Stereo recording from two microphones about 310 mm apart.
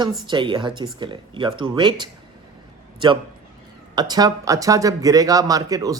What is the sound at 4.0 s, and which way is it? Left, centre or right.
Speech, centre.